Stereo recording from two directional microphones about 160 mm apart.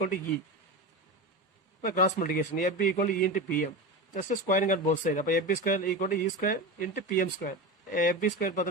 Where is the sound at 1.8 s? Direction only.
50° left (ahead or behind).